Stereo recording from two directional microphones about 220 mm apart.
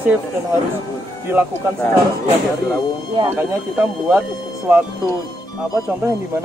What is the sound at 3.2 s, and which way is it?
Speech, 10° right (ahead or behind).